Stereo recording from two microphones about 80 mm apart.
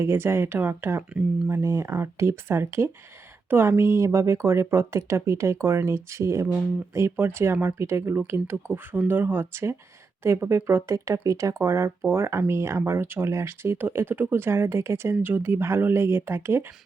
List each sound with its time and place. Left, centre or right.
0.0 s speech: right